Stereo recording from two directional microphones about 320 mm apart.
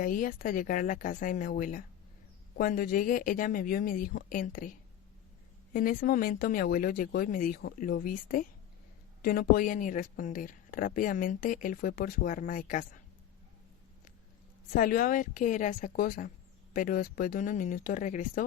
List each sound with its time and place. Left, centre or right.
0.0 s a woman's voice: left
5.7 s a woman's voice: left
14.8 s a woman's voice: left